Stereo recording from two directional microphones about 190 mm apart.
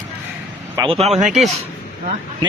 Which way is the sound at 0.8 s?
20° right (ahead or behind).